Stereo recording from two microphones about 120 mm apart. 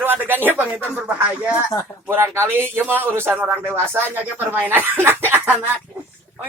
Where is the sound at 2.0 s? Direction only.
20° right (ahead or behind).